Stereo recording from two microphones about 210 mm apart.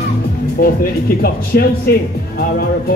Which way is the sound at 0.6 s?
45° left (ahead or behind).